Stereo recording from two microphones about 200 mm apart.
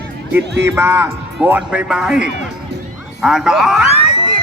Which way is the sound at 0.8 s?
10° right (ahead or behind).